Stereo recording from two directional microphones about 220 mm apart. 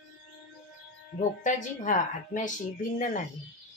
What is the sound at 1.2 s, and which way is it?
A woman's voice, 35° left (ahead or behind).